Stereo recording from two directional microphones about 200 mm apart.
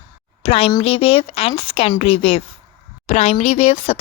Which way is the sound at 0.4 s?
30° left (ahead or behind).